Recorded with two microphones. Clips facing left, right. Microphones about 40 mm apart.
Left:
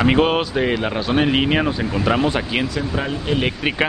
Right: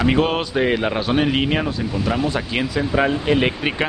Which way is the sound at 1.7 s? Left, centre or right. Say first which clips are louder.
Left 3 dB; left.